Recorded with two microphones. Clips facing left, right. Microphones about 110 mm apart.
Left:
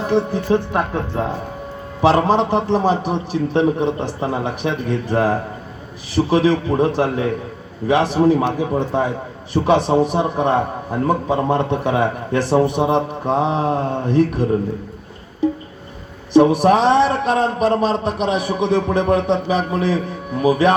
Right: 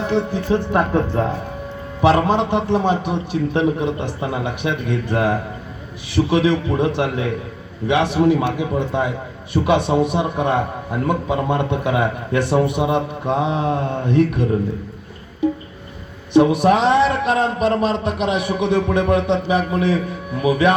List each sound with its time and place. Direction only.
0.1 s speech: 25° left (ahead or behind)
2.0 s a man's voice: 35° left (ahead or behind)
16.3 s a man's voice: 35° left (ahead or behind)